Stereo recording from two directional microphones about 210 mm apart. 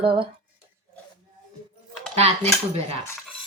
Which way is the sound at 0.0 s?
25° right (ahead or behind).